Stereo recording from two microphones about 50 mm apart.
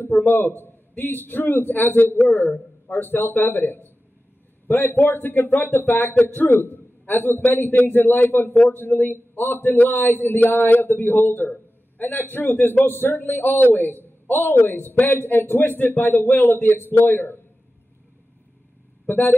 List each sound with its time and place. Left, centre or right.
0.0 s a man's voice: left
19.0 s speech: left